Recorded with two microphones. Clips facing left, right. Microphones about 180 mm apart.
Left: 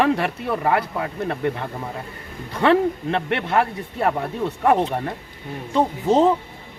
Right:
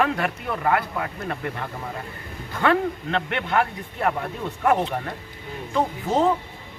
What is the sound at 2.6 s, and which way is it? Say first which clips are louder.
A man's voice: left 4 dB; 30° left (ahead or behind).